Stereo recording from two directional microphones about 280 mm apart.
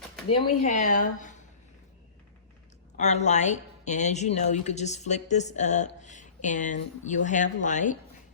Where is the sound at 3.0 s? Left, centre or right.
Left.